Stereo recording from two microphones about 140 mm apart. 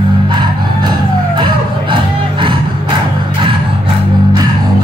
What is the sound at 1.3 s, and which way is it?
Vehicle, 35° right (ahead or behind).